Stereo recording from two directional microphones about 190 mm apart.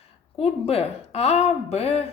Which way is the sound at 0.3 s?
30° left (ahead or behind).